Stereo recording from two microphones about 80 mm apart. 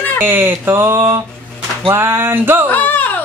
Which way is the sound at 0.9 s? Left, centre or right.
Right.